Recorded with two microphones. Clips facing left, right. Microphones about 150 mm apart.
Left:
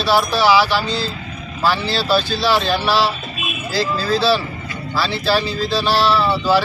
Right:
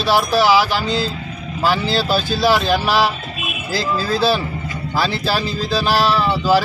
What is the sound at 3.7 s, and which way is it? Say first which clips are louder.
Speech: left 1 dB; 50° right (ahead or behind).